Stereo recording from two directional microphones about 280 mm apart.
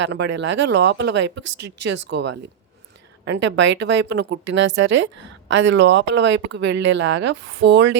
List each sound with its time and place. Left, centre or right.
0.0 s speech: right